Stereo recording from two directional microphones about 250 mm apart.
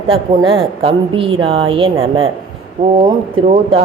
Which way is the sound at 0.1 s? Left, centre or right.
Right.